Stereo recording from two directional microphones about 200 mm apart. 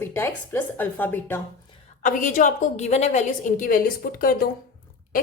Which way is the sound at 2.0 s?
40° left (ahead or behind).